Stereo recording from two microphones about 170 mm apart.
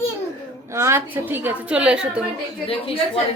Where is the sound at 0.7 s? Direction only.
15° right (ahead or behind).